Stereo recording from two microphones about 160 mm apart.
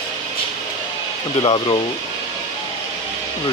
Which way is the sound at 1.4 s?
30° left (ahead or behind).